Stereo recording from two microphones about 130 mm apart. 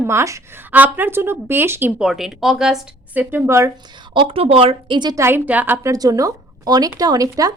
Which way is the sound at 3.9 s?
35° right (ahead or behind).